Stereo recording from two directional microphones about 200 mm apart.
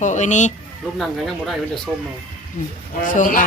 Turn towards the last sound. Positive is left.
turn(degrees=40)  # may be behind; listen again after turning